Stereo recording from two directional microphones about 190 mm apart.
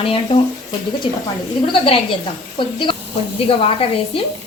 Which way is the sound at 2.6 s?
25° left (ahead or behind).